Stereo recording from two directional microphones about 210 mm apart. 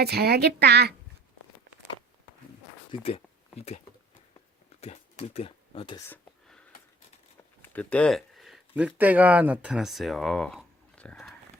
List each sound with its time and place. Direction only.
0.0 s a woman's voice: 50° right (ahead or behind)
2.9 s speech: 25° left (ahead or behind)
4.8 s speech: 30° left (ahead or behind)
7.6 s speech: 5° left (ahead or behind)